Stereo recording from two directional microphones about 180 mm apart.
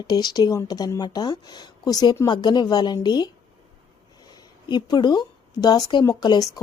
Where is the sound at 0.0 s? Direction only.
20° left (ahead or behind).